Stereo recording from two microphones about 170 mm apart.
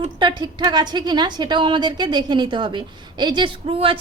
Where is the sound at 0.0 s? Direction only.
25° right (ahead or behind).